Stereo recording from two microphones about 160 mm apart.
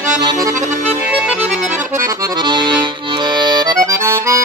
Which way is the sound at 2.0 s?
30° right (ahead or behind).